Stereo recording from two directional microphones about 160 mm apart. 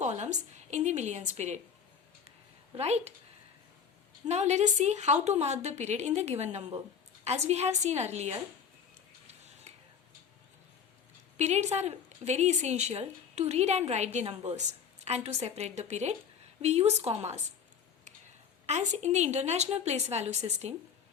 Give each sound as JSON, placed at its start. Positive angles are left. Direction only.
{"t": 0.0, "sound": "a woman's voice", "side_deg": -45}
{"t": 2.7, "sound": "speech", "side_deg": -40}
{"t": 4.3, "sound": "a woman's voice", "side_deg": -45}
{"t": 11.3, "sound": "a woman's voice", "side_deg": -45}
{"t": 18.6, "sound": "a woman's voice", "side_deg": -45}